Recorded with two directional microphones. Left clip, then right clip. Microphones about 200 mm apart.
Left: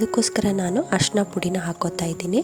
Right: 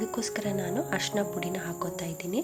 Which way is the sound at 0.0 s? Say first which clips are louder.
Left 10 dB; 45° left (ahead or behind).